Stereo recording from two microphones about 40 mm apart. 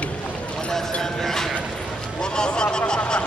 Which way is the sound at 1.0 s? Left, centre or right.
Centre.